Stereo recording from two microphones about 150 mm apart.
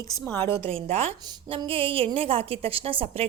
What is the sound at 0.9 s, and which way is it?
A woman's voice, 40° right (ahead or behind).